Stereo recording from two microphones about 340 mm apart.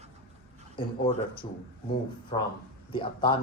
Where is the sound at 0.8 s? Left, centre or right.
Centre.